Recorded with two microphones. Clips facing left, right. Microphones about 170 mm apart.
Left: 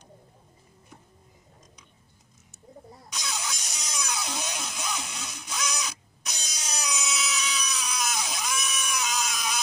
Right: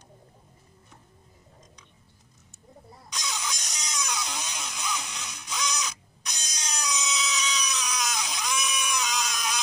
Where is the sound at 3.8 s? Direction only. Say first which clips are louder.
Even; 5° left (ahead or behind).